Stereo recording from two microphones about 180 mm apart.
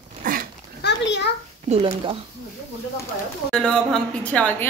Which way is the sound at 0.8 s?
70° left (ahead or behind).